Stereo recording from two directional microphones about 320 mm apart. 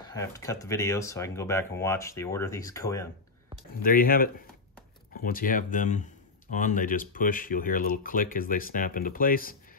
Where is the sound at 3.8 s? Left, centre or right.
Left.